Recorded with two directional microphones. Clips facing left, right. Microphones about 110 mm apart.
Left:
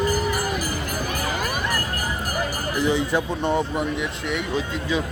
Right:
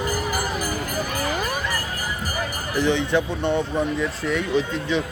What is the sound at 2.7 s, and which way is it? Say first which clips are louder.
Speech: right 2 dB; 5° left (ahead or behind).